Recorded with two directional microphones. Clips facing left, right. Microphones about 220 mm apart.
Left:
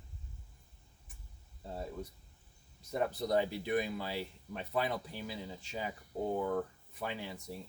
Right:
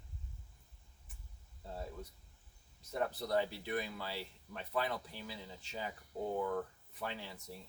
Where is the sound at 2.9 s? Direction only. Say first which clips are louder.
Left 3 dB; 15° left (ahead or behind).